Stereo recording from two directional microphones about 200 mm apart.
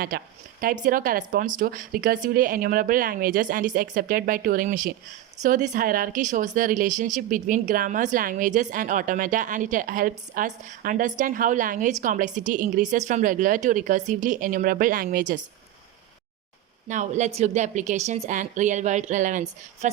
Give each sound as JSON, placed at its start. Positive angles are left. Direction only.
{"t": 0.1, "sound": "speech", "side_deg": -50}
{"t": 16.9, "sound": "speech", "side_deg": -35}